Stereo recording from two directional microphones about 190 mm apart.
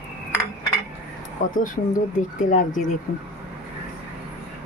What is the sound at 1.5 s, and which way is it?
Speech, 45° left (ahead or behind).